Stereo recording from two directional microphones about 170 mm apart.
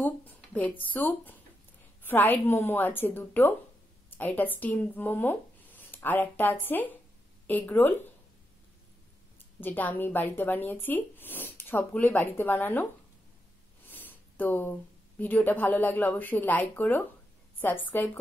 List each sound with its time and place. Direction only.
0.0 s a sound: 10° left (ahead or behind)
2.0 s speech: 10° left (ahead or behind)
9.6 s speech: 10° left (ahead or behind)
13.8 s speech: 10° left (ahead or behind)